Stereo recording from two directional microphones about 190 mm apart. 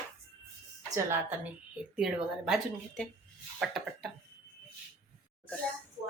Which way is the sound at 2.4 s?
Centre (ahead or behind).